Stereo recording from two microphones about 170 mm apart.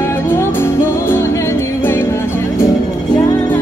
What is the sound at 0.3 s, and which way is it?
Music, 15° left (ahead or behind).